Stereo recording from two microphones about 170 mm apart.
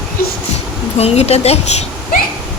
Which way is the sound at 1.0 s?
40° left (ahead or behind).